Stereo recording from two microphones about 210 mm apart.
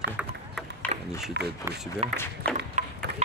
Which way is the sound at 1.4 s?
55° right (ahead or behind).